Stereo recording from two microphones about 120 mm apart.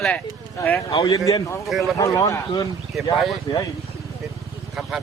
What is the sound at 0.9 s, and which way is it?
A man's voice, 40° left (ahead or behind).